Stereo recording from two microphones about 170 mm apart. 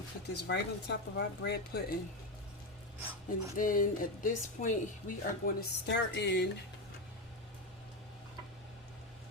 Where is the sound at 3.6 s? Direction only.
55° left (ahead or behind).